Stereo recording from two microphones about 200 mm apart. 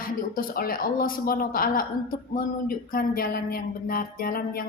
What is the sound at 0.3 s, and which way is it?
A woman's voice, 45° left (ahead or behind).